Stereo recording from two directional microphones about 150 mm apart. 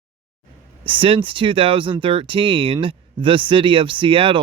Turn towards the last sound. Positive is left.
turn(degrees=-35)  # may be behind; listen again after turning